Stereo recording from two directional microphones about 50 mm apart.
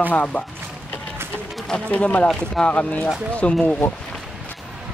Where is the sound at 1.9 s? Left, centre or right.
Left.